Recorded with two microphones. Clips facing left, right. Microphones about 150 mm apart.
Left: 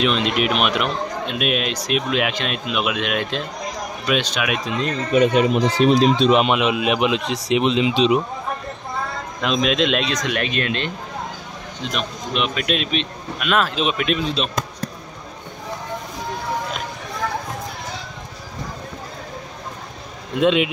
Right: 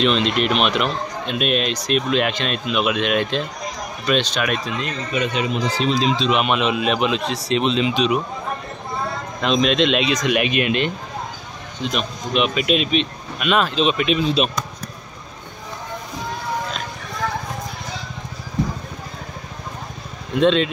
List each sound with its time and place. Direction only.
0.0 s a man's voice: 5° left (ahead or behind)
4.7 s speech: 40° left (ahead or behind)
6.5 s a man's voice: 10° left (ahead or behind)
7.9 s speech: 25° left (ahead or behind)
9.4 s a man's voice: 5° left (ahead or behind)
10.0 s speech: 10° right (ahead or behind)
11.9 s a man's voice: 5° right (ahead or behind)
20.3 s a man's voice: 10° left (ahead or behind)